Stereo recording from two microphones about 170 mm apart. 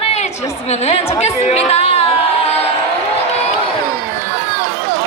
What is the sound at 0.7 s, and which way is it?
A woman's voice, 40° left (ahead or behind).